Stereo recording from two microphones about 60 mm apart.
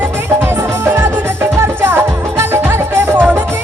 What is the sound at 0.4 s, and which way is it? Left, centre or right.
Music, right.